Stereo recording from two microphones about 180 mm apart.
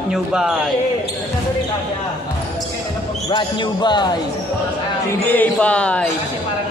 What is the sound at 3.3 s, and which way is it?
Speech, 25° left (ahead or behind).